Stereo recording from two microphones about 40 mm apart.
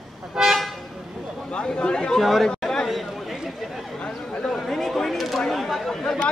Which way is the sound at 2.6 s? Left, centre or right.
Centre.